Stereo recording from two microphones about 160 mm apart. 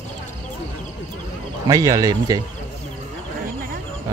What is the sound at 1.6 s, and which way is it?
Speech, 20° right (ahead or behind).